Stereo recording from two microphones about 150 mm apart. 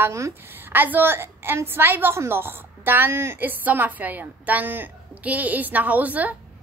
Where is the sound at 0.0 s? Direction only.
15° right (ahead or behind).